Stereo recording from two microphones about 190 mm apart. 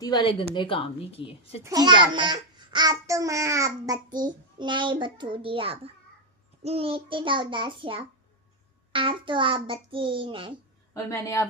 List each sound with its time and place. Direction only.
0.0 s a woman's voice: 20° left (ahead or behind)
1.6 s a child's voice: 20° right (ahead or behind)
10.9 s a woman's voice: 15° left (ahead or behind)